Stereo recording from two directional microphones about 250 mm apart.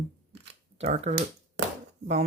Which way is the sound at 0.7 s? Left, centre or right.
Right.